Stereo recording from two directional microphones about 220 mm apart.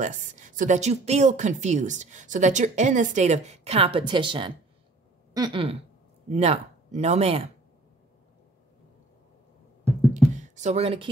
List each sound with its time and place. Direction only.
0.0 s speech: 35° right (ahead or behind)
5.3 s throat clearing: 20° right (ahead or behind)
6.2 s speech: 30° right (ahead or behind)
10.1 s a sound: 35° right (ahead or behind)